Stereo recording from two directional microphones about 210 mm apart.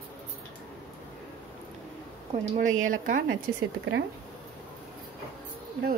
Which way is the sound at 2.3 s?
35° right (ahead or behind).